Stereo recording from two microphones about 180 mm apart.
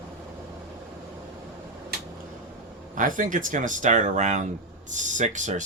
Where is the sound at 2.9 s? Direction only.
45° right (ahead or behind).